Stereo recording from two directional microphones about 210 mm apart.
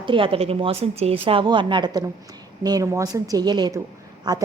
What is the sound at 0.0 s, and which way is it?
A woman's voice, 25° right (ahead or behind).